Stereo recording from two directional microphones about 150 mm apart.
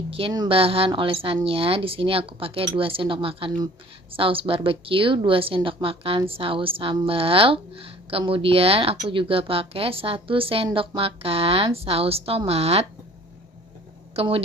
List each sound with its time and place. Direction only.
0.1 s a woman's voice: 40° right (ahead or behind)
14.2 s a woman's voice: 40° right (ahead or behind)